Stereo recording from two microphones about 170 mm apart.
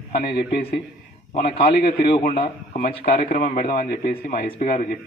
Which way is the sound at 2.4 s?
60° left (ahead or behind).